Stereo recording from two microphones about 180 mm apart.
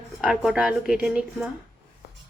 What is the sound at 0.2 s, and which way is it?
Speech, centre (ahead or behind).